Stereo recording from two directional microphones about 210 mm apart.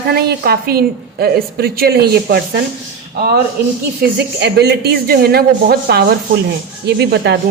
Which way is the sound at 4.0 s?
50° right (ahead or behind).